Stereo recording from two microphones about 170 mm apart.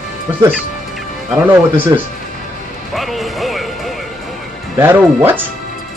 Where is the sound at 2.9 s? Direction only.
Centre (ahead or behind).